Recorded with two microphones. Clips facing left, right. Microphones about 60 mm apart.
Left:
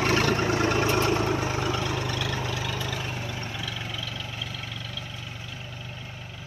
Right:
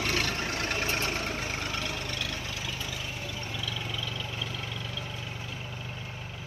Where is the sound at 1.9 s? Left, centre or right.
Left.